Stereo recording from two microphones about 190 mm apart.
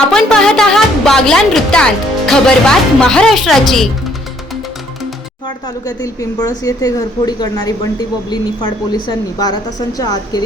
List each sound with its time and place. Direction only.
0.1 s a woman's voice: 5° left (ahead or behind)
5.8 s speech: 20° left (ahead or behind)